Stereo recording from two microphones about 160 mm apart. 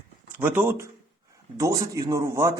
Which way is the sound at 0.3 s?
15° right (ahead or behind).